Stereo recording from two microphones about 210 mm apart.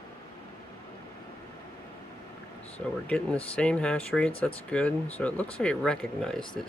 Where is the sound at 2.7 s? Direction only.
5° left (ahead or behind).